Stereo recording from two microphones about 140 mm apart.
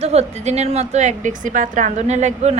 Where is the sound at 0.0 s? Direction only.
50° right (ahead or behind).